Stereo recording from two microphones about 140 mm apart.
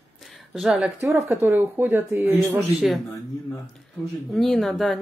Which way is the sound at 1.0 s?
20° right (ahead or behind).